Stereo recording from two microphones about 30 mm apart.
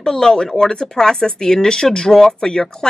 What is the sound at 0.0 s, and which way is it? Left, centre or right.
Speech, centre.